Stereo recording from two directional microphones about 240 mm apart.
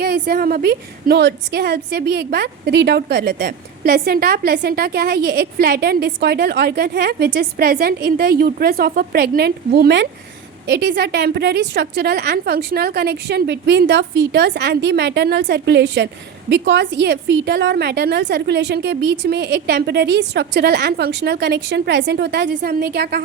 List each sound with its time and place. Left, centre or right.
0.0 s a woman's voice: right